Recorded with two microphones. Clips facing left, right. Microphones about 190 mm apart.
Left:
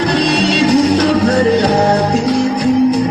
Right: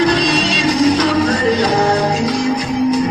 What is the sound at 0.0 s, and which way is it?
Music, 60° left (ahead or behind).